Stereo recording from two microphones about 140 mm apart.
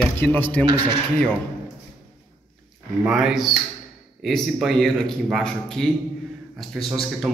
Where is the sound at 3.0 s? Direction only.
5° right (ahead or behind).